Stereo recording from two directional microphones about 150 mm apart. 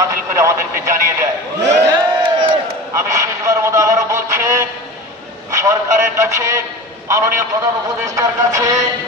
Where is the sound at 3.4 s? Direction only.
20° right (ahead or behind).